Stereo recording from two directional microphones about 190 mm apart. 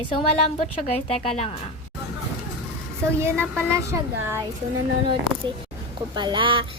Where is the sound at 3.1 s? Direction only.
15° right (ahead or behind).